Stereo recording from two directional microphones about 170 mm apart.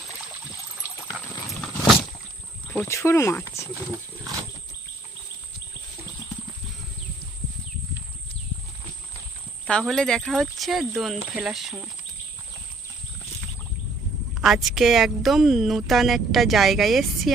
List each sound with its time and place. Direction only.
1.5 s a sound: centre (ahead or behind)
2.8 s speech: 15° left (ahead or behind)
3.9 s wild animals: 15° right (ahead or behind)
9.6 s speech: 5° left (ahead or behind)
14.4 s speech: centre (ahead or behind)